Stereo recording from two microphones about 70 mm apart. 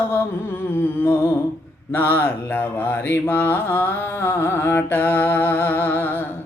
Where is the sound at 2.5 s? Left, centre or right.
Left.